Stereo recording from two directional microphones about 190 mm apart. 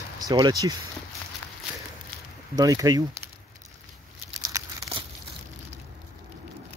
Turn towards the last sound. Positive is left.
turn(degrees=-15)  # may be behind; listen again after turning